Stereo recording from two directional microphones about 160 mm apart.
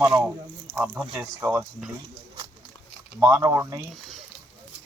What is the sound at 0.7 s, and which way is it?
Speech, 10° right (ahead or behind).